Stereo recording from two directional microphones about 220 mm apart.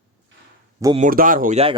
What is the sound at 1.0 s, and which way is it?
Speech, 40° right (ahead or behind).